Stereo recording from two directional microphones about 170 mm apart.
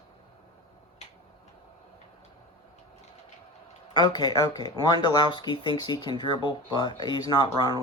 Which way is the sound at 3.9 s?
25° left (ahead or behind).